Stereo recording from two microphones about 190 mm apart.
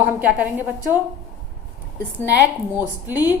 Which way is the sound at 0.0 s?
10° right (ahead or behind).